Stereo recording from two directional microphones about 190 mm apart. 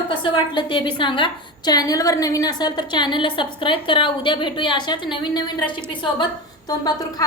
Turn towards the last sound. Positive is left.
turn(degrees=20)  # may be behind; listen again after turning